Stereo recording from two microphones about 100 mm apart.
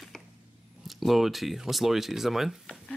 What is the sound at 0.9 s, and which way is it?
Speech, centre (ahead or behind).